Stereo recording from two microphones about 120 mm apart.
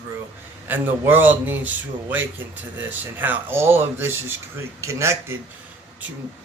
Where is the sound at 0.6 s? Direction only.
15° right (ahead or behind).